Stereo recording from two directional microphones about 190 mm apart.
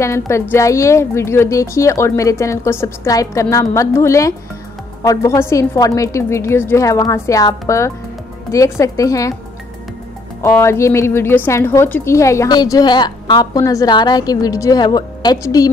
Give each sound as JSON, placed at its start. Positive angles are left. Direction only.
{"t": 0.0, "sound": "a woman's voice", "side_deg": 15}
{"t": 10.4, "sound": "a woman's voice", "side_deg": 15}